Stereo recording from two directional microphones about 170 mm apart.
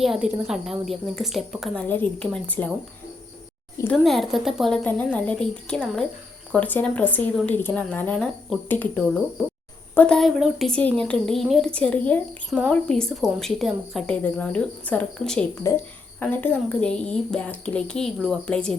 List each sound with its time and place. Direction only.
0.0 s a woman's voice: centre (ahead or behind)
3.9 s a woman's voice: centre (ahead or behind)
15.6 s a woman's voice: 15° left (ahead or behind)